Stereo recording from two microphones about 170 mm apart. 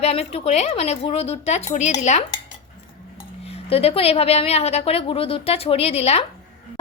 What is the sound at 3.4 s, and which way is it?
A woman's voice, 35° left (ahead or behind).